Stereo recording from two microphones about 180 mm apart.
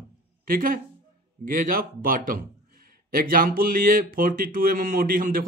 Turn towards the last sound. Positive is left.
turn(degrees=-50)  # may be behind; listen again after turning